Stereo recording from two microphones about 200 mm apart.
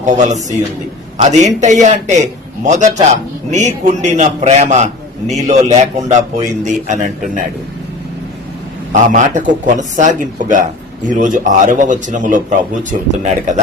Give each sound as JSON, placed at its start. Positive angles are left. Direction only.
{"t": 0.0, "sound": "a man's voice", "side_deg": -35}
{"t": 8.9, "sound": "a man's voice", "side_deg": -40}